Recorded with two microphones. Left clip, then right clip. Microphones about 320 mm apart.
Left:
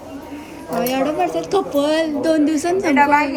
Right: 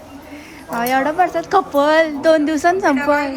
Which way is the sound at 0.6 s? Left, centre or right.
Centre.